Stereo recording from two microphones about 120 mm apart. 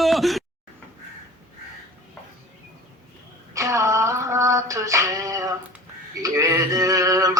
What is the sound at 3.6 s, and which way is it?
Female singing, 25° right (ahead or behind).